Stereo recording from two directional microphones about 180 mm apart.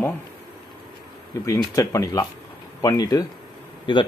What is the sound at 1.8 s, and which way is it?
Speech, 20° left (ahead or behind).